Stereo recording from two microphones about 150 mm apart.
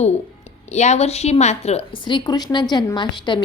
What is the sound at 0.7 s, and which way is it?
A woman's voice, 50° left (ahead or behind).